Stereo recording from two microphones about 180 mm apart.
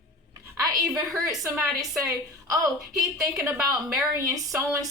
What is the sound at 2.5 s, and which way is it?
Speech, 20° right (ahead or behind).